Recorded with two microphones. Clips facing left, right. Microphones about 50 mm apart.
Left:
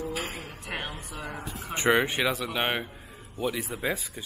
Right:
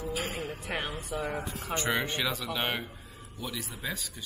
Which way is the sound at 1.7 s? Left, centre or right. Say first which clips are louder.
Left 7 dB; left.